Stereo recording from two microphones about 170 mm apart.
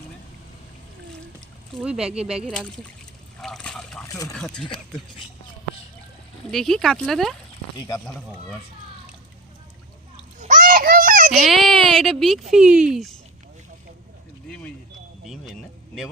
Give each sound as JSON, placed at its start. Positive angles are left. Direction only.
{"t": 1.8, "sound": "speech", "side_deg": -5}
{"t": 3.4, "sound": "a sound", "side_deg": 0}
{"t": 4.0, "sound": "speech", "side_deg": 20}
{"t": 4.4, "sound": "speech", "side_deg": 5}
{"t": 6.5, "sound": "speech", "side_deg": 0}
{"t": 7.8, "sound": "speech", "side_deg": 20}
{"t": 10.3, "sound": "a sound", "side_deg": -50}
{"t": 11.3, "sound": "speech", "side_deg": 0}